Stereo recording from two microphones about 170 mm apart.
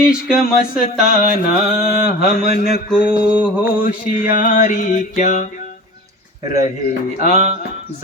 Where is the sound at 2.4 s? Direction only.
60° left (ahead or behind).